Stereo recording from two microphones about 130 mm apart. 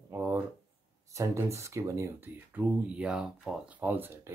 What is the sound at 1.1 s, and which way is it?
Speech, 25° right (ahead or behind).